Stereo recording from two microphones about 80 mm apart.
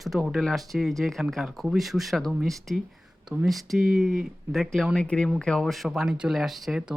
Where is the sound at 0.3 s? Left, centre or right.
Centre.